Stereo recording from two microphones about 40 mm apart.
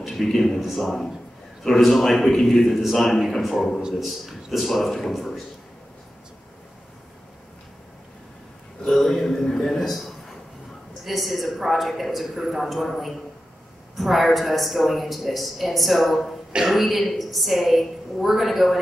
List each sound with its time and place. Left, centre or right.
0.0 s a man's voice: centre
0.6 s a woman's voice: centre
8.9 s a man's voice: centre